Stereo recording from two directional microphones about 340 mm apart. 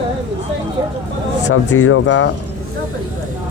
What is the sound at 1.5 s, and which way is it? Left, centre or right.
Speech, left.